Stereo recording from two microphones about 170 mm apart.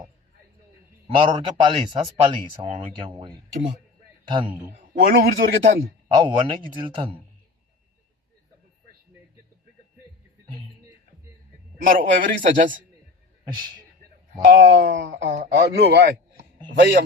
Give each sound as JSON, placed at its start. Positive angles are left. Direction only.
{"t": 1.0, "sound": "a man's voice", "side_deg": -30}
{"t": 4.9, "sound": "speech", "side_deg": -60}
{"t": 6.1, "sound": "a man's voice", "side_deg": -25}
{"t": 11.9, "sound": "a man's voice", "side_deg": -50}
{"t": 14.4, "sound": "a man's voice", "side_deg": -60}